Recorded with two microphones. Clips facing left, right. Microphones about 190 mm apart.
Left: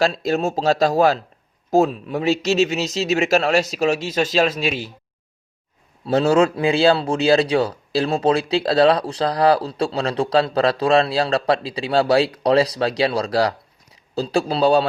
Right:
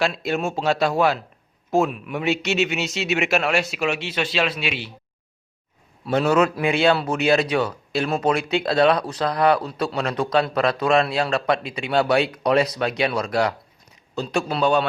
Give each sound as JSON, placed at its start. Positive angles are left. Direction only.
{"t": 0.0, "sound": "speech", "side_deg": 40}
{"t": 6.1, "sound": "speech", "side_deg": 30}